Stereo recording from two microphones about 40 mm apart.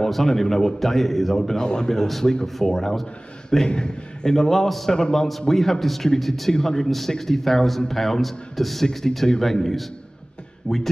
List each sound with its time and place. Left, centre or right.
0.0 s a man's voice: centre
1.6 s a man's voice: centre
4.9 s a man's voice: centre